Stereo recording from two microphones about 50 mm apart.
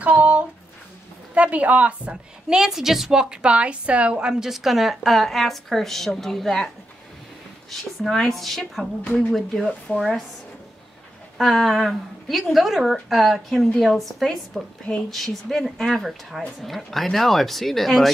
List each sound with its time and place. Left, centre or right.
0.0 s a sound: right
1.3 s speech: right
2.5 s a woman's voice: centre
4.3 s speech: centre
7.7 s speech: centre
9.7 s speech: centre
11.3 s speech: centre